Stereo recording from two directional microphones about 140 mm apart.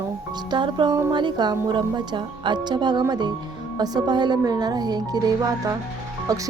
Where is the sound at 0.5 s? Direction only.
35° right (ahead or behind).